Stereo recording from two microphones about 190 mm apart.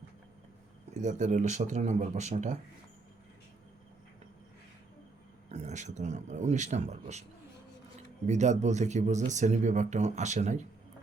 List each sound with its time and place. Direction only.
0.9 s speech: 40° right (ahead or behind)
5.5 s speech: 35° right (ahead or behind)
8.3 s speech: 40° right (ahead or behind)